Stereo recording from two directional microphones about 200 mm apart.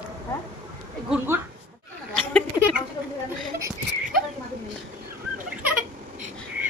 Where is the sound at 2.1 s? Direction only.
5° left (ahead or behind).